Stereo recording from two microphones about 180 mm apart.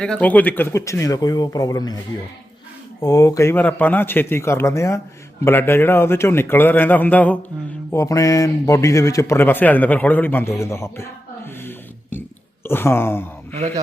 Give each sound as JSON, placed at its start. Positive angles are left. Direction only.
{"t": 0.0, "sound": "a man's voice", "side_deg": 5}
{"t": 3.0, "sound": "a man's voice", "side_deg": 20}
{"t": 12.1, "sound": "burping", "side_deg": 10}
{"t": 12.6, "sound": "a man's voice", "side_deg": 15}